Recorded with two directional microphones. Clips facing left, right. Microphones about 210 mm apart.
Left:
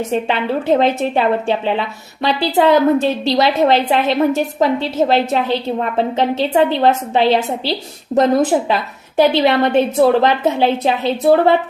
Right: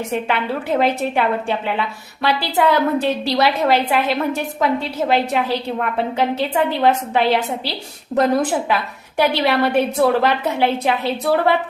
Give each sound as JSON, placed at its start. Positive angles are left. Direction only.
{"t": 0.1, "sound": "a woman's voice", "side_deg": 25}